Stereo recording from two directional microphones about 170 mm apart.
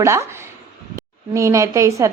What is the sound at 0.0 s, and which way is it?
Speech, 15° right (ahead or behind).